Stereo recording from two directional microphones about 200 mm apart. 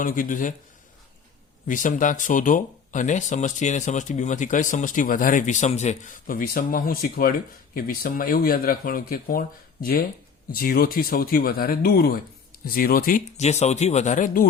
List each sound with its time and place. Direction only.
0.0 s speech: 45° left (ahead or behind)
1.6 s speech: 40° left (ahead or behind)
10.5 s speech: 45° left (ahead or behind)